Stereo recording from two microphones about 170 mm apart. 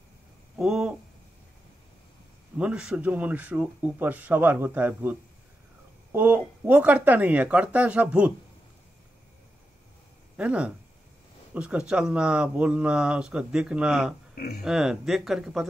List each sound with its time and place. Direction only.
0.6 s speech: 5° right (ahead or behind)
2.5 s speech: 5° right (ahead or behind)
6.1 s speech: 10° right (ahead or behind)
10.3 s speech: 5° right (ahead or behind)
14.3 s speech: 60° left (ahead or behind)
14.6 s speech: 5° right (ahead or behind)